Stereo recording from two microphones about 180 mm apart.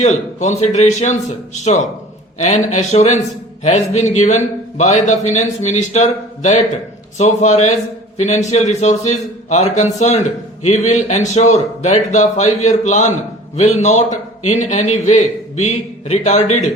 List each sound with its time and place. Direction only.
0.0 s a man's voice: 40° left (ahead or behind)